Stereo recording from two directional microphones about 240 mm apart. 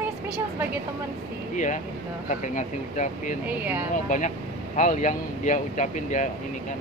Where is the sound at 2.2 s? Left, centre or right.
Left.